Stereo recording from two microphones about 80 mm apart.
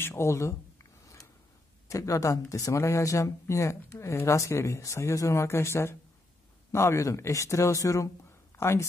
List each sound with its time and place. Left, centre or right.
0.0 s speech: left
1.0 s a sound: left
1.9 s speech: left